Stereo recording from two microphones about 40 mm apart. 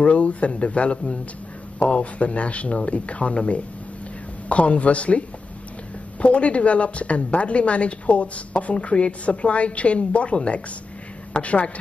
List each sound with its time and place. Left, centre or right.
0.0 s a woman's voice: left
6.2 s a woman's voice: left